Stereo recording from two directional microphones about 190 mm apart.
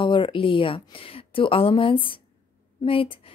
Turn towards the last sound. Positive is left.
turn(degrees=30)  # may be behind; listen again after turning